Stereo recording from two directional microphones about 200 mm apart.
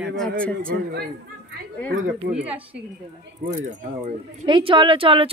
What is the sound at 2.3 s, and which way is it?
Speech, 5° right (ahead or behind).